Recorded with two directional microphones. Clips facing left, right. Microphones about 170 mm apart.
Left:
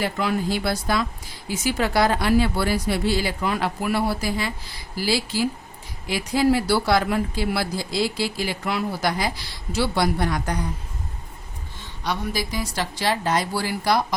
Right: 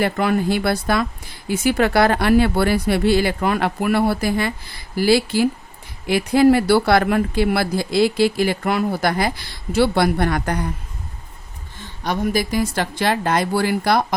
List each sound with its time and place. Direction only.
0.0 s speech: 55° right (ahead or behind)
11.8 s a woman's voice: 50° right (ahead or behind)